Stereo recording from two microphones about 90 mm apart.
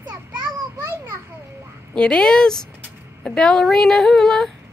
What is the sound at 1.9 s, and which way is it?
A woman's voice, 10° left (ahead or behind).